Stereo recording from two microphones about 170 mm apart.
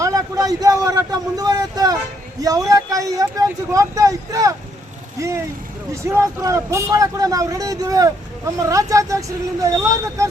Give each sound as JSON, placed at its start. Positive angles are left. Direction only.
{"t": 0.0, "sound": "a sound", "side_deg": -20}
{"t": 2.4, "sound": "speech", "side_deg": -20}
{"t": 5.9, "sound": "speech", "side_deg": -15}